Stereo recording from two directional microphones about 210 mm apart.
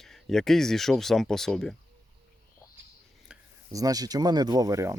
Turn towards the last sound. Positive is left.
turn(degrees=-15)  # may be behind; listen again after turning